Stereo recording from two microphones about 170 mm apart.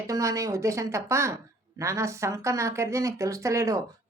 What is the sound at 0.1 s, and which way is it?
A woman's voice, 20° right (ahead or behind).